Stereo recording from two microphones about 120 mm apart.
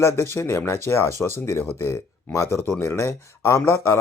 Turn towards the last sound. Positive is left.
turn(degrees=25)  # may be behind; listen again after turning